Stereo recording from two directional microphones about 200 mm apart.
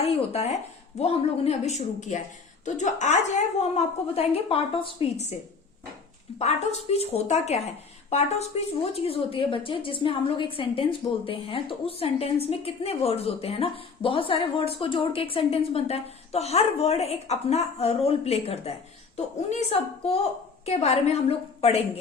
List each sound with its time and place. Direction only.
0.0 s a woman's voice: 30° left (ahead or behind)
6.4 s a woman's voice: 35° left (ahead or behind)
20.7 s a woman's voice: 30° left (ahead or behind)